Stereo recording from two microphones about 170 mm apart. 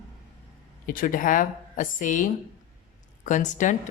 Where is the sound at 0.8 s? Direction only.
55° left (ahead or behind).